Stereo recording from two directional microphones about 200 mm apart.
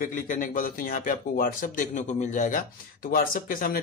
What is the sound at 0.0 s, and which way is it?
Speech, 40° left (ahead or behind).